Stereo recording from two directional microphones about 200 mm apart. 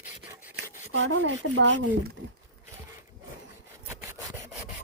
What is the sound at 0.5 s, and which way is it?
Speech, 65° right (ahead or behind).